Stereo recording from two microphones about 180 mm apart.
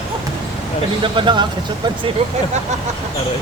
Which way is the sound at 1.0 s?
25° right (ahead or behind).